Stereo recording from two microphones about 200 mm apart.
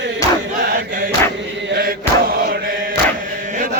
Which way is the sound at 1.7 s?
50° right (ahead or behind).